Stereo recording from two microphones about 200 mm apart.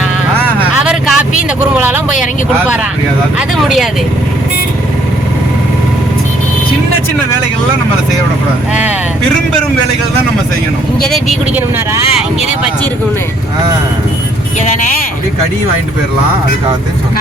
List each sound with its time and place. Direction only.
0.8 s vehicle: centre (ahead or behind)
1.7 s a sound: 5° right (ahead or behind)
3.3 s speech: centre (ahead or behind)
11.0 s speech: centre (ahead or behind)
14.6 s speech: 35° left (ahead or behind)